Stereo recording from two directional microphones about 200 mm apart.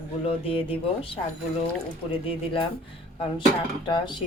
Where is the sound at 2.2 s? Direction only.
25° left (ahead or behind).